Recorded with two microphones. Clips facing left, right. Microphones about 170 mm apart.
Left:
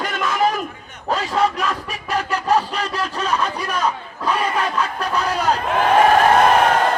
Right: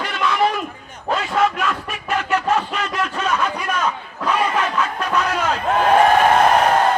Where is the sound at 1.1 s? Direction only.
35° left (ahead or behind).